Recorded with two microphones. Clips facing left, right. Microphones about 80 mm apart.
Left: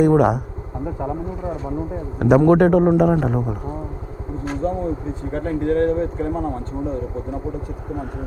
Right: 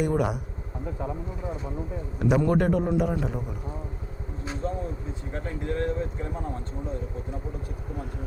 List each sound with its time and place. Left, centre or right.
0.0 s a man's voice: left
0.9 s speech: left
2.1 s a man's voice: left
4.4 s speech: left